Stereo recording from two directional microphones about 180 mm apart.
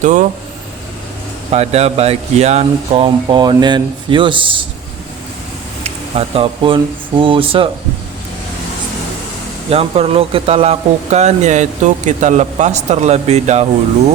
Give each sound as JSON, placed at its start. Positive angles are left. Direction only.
{"t": 0.0, "sound": "speech", "side_deg": -45}
{"t": 1.5, "sound": "speech", "side_deg": -35}
{"t": 5.8, "sound": "speech", "side_deg": -35}
{"t": 9.6, "sound": "speech", "side_deg": -35}